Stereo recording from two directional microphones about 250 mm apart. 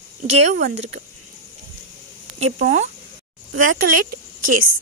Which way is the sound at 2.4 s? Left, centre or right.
Right.